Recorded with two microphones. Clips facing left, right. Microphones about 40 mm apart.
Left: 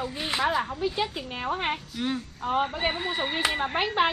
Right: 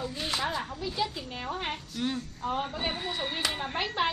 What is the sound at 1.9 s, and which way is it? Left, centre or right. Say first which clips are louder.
Speech: left 2 dB; centre.